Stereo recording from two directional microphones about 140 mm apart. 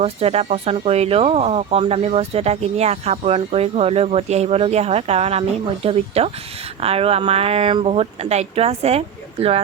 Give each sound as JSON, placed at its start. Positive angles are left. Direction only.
{"t": 0.0, "sound": "speech", "side_deg": -45}